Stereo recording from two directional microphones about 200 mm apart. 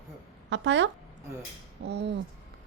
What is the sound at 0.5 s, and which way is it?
Speech, 65° right (ahead or behind).